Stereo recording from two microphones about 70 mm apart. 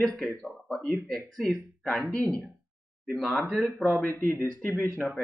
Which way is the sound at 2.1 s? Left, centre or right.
Right.